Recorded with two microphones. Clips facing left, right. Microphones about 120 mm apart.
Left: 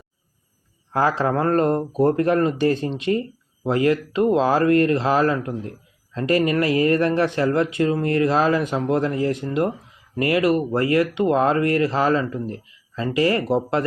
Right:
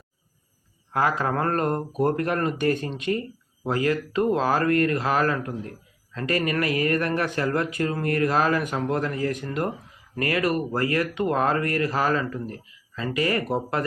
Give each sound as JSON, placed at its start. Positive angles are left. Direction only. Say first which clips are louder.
{"t": 0.9, "sound": "speech", "louder": "left 4 dB", "side_deg": 30}